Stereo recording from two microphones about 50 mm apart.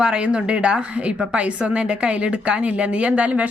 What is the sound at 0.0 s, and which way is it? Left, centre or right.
A woman's voice, centre.